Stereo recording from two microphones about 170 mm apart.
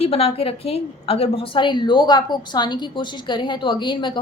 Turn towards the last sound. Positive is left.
turn(degrees=25)  # may be behind; listen again after turning